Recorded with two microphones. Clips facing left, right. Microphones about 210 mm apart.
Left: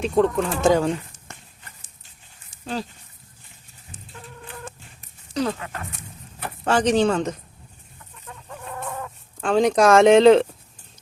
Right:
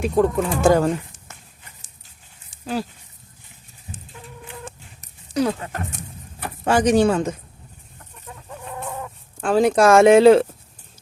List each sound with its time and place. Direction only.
0.0 s speech: 10° right (ahead or behind)
4.1 s fowl: 10° right (ahead or behind)
5.3 s speech: 10° right (ahead or behind)
5.5 s speech: 40° right (ahead or behind)
6.7 s speech: 10° right (ahead or behind)
8.4 s chicken: 10° right (ahead or behind)